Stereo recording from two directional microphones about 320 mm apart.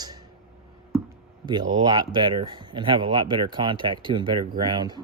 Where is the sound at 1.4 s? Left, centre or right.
Centre.